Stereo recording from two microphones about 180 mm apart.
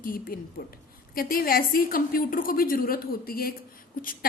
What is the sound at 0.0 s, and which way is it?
A woman's voice, 50° left (ahead or behind).